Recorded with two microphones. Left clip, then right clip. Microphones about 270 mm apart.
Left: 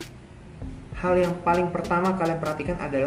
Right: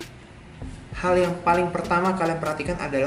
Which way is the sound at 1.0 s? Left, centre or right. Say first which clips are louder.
Right 2 dB; centre.